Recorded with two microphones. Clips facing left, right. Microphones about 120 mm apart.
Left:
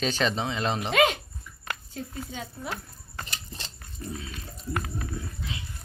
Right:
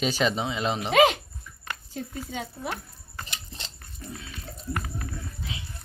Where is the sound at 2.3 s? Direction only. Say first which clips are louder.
Right 3 dB; 60° right (ahead or behind).